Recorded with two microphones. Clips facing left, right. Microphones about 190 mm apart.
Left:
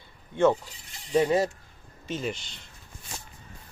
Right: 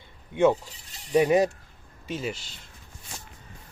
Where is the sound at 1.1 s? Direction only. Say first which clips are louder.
Right 3 dB; 15° right (ahead or behind).